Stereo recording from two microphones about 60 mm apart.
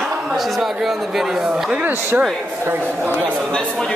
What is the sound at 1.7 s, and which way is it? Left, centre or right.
Speech, right.